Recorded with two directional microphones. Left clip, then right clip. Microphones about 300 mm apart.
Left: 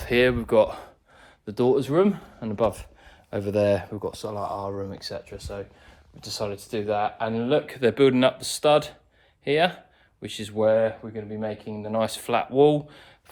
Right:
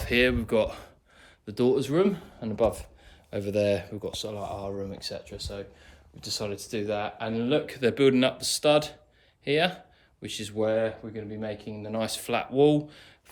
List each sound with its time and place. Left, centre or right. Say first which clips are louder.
0.0 s speech: left 3 dB; centre
6.1 s speech: left 2 dB; centre